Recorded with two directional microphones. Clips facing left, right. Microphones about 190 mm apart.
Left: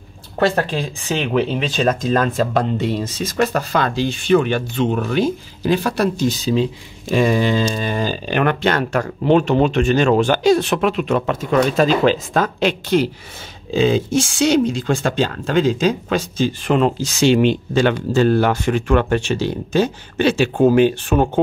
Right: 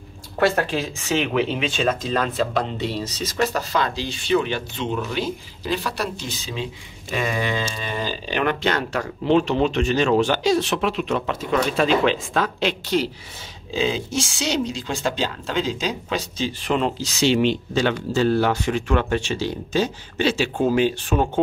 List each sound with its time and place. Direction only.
0.6 s speech: 35° left (ahead or behind); by 21.3 s 55° left (ahead or behind)